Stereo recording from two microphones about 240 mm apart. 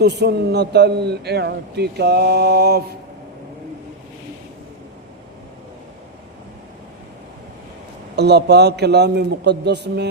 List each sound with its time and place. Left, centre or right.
0.0 s a man's voice: right
8.1 s a man's voice: right